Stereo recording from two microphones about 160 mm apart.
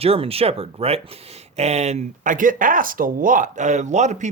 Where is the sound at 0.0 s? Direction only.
40° right (ahead or behind).